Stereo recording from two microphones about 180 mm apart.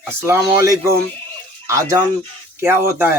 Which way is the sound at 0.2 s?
15° right (ahead or behind).